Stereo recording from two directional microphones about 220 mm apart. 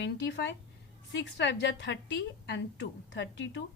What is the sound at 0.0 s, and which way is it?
A woman's voice, 50° left (ahead or behind).